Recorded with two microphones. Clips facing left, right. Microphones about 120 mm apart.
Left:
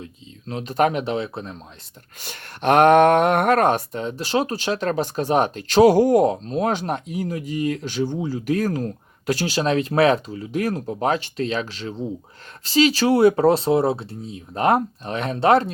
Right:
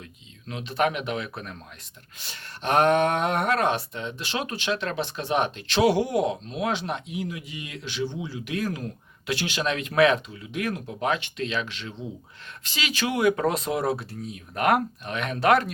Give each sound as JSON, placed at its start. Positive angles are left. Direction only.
{"t": 0.0, "sound": "speech", "side_deg": 35}
{"t": 2.2, "sound": "speech", "side_deg": 60}